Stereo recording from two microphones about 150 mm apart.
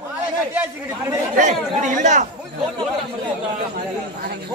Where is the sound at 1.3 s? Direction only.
55° right (ahead or behind).